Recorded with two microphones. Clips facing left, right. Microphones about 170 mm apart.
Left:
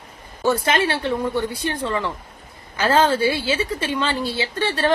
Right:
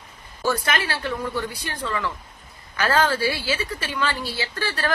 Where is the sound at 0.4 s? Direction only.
25° left (ahead or behind).